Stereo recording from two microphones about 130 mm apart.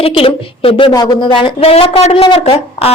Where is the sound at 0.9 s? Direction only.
30° left (ahead or behind).